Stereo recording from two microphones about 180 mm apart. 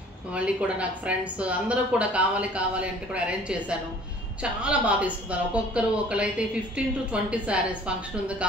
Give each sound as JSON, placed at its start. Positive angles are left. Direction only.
{"t": 0.3, "sound": "speech", "side_deg": -5}